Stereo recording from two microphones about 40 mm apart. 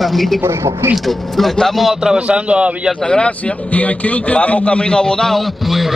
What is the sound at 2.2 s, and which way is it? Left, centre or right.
Speech, right.